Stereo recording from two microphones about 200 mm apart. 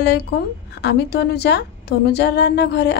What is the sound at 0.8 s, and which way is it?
A woman's voice, 55° left (ahead or behind).